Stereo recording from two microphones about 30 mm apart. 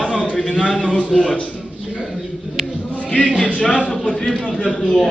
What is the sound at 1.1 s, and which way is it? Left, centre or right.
Speech, centre.